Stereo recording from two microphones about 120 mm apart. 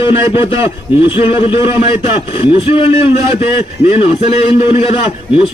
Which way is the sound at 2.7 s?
50° left (ahead or behind).